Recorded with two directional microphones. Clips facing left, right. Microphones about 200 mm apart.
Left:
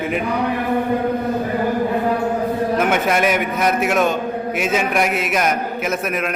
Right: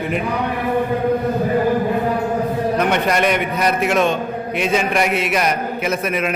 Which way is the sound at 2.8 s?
5° left (ahead or behind).